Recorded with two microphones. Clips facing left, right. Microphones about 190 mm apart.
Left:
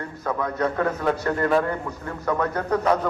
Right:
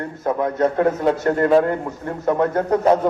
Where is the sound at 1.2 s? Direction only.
45° right (ahead or behind).